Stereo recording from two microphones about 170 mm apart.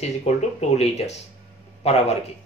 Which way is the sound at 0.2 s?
40° left (ahead or behind).